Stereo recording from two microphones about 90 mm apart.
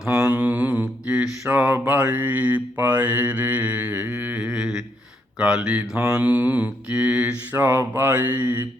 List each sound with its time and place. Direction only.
0.3 s mantra: 15° right (ahead or behind)
5.4 s speech: 10° right (ahead or behind)
6.1 s mantra: 15° right (ahead or behind)
7.5 s mantra: 25° right (ahead or behind)